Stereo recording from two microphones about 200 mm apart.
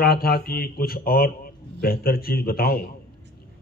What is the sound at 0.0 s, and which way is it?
A man's voice, 50° left (ahead or behind).